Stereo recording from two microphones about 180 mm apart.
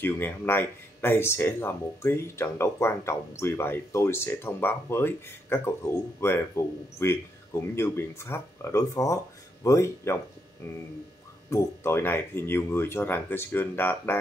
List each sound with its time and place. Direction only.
0.0 s speech: 10° left (ahead or behind)